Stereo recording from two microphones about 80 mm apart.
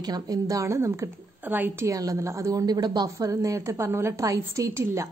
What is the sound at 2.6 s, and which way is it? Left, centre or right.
Speech, right.